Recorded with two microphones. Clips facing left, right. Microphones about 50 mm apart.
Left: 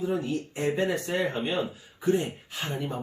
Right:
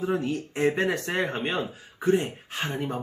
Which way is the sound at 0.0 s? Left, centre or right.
Right.